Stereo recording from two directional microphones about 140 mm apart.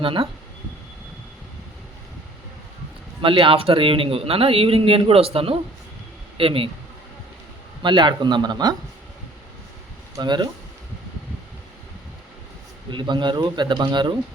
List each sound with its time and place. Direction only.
0.0 s speech: 40° right (ahead or behind)
3.2 s a man's voice: 40° right (ahead or behind)
7.8 s speech: 35° right (ahead or behind)
10.2 s speech: 30° right (ahead or behind)
12.9 s speech: 35° right (ahead or behind)